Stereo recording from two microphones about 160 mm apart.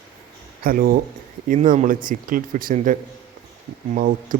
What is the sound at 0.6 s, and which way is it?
Speech, 65° right (ahead or behind).